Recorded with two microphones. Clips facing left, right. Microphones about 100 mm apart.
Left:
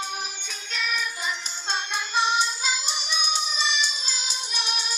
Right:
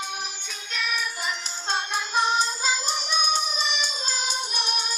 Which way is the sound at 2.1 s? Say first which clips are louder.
Even; 40° right (ahead or behind).